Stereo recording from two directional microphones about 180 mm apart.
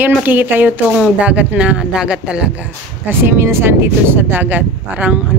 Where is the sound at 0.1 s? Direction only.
10° right (ahead or behind).